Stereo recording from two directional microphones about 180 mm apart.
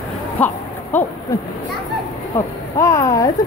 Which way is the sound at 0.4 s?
10° left (ahead or behind).